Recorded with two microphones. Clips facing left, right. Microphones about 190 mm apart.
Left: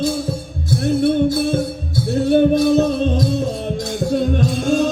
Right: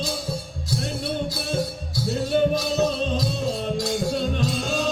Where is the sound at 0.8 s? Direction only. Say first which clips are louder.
Left 15 dB; 55° left (ahead or behind).